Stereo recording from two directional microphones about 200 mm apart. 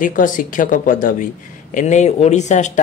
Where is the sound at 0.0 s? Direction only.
40° left (ahead or behind).